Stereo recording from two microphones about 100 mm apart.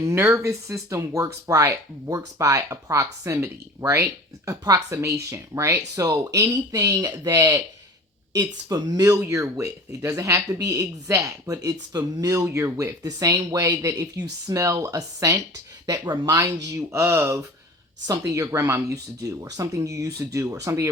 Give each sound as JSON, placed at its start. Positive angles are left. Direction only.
{"t": 0.0, "sound": "speech", "side_deg": -30}